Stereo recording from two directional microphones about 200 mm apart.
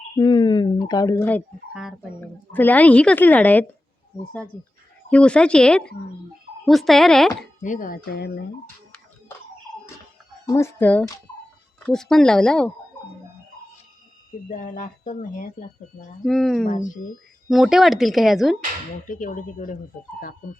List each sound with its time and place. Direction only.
0.2 s speech: 20° left (ahead or behind)
1.7 s speech: centre (ahead or behind)
2.5 s a woman's voice: 10° left (ahead or behind)
5.0 s speech: 5° left (ahead or behind)
7.6 s speech: 40° left (ahead or behind)
10.4 s a woman's voice: 15° left (ahead or behind)
14.5 s speech: 40° left (ahead or behind)
16.2 s speech: centre (ahead or behind)
16.6 s speech: 40° left (ahead or behind)
17.5 s speech: centre (ahead or behind)
19.0 s speech: 40° left (ahead or behind)